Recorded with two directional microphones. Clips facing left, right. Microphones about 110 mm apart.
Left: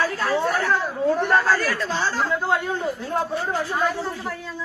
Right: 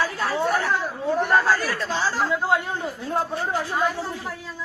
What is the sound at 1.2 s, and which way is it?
A woman's voice, centre (ahead or behind).